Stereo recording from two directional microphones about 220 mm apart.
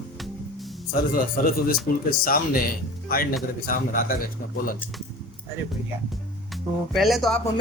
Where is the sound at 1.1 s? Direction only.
40° left (ahead or behind).